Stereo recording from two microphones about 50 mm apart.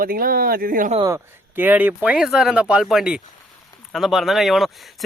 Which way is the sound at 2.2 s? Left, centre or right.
Centre.